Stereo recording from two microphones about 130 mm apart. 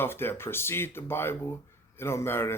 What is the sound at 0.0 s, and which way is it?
A man's voice, 15° left (ahead or behind).